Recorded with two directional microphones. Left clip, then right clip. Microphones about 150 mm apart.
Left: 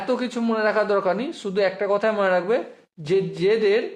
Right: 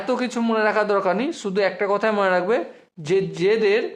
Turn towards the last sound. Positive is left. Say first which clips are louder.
# right 1 dB
turn(degrees=-20)  # may be behind; listen again after turning